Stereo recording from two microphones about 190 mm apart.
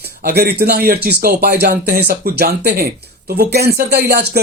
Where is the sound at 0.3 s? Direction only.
55° right (ahead or behind).